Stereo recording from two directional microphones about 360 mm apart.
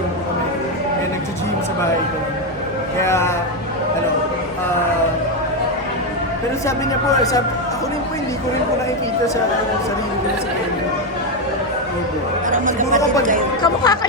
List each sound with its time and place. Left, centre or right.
3.0 s a sound: centre
12.5 s speech: right
13.6 s chatter: centre